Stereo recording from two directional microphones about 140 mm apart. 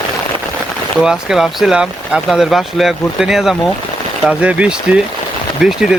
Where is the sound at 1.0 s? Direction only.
5° right (ahead or behind).